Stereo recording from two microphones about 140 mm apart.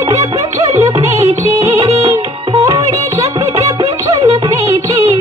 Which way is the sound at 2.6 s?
25° right (ahead or behind).